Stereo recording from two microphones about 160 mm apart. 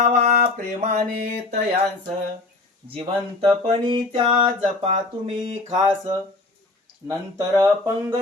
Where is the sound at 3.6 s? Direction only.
35° right (ahead or behind).